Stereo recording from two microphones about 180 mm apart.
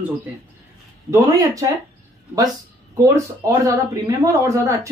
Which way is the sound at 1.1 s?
20° right (ahead or behind).